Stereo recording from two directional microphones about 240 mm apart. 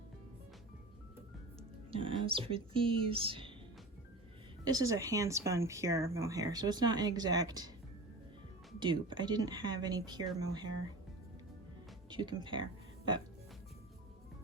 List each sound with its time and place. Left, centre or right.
1.9 s speech: right
4.6 s speech: centre
8.8 s speech: centre
12.1 s speech: centre